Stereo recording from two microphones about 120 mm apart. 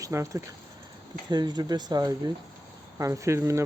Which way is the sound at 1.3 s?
35° right (ahead or behind).